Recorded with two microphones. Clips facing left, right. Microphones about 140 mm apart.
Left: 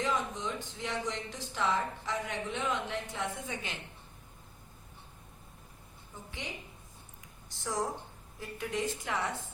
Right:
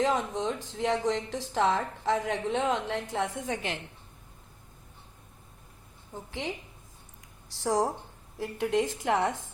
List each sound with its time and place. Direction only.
0.0 s speech: 90° right
7.5 s a woman's voice: 90° right